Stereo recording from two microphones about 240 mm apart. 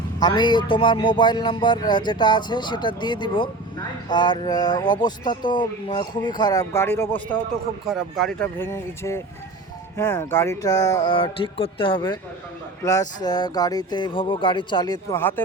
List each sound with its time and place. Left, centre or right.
0.2 s a man's voice: centre
7.9 s speech: centre